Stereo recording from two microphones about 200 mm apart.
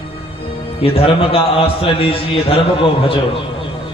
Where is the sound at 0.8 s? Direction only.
30° left (ahead or behind).